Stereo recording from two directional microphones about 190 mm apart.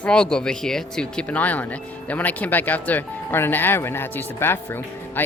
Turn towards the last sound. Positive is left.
turn(degrees=10)  # may be behind; listen again after turning